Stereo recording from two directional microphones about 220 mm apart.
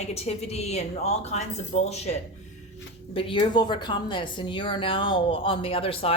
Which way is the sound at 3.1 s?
25° left (ahead or behind).